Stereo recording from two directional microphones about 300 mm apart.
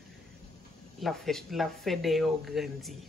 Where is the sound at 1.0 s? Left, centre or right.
Centre.